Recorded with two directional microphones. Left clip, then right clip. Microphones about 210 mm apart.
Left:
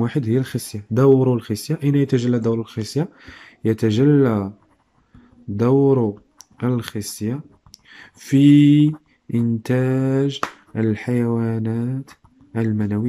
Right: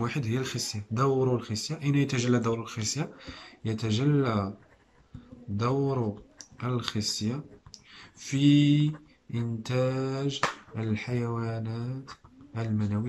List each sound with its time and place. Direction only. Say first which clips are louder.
0.0 s speech: left 10 dB; 30° left (ahead or behind)
6.6 s speech: left 7 dB; 40° left (ahead or behind)
7.9 s a sound: left 14 dB; 40° left (ahead or behind)
9.3 s speech: left 11 dB; 40° left (ahead or behind)